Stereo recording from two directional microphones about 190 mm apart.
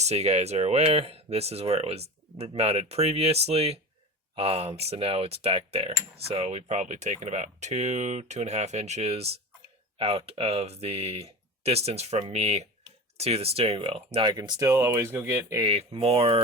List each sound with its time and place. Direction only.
0.0 s speech: 35° right (ahead or behind); by 15.6 s 15° right (ahead or behind)
15.6 s speech: 30° right (ahead or behind)